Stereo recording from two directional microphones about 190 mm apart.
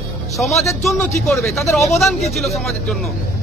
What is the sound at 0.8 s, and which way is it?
A man's voice, centre (ahead or behind).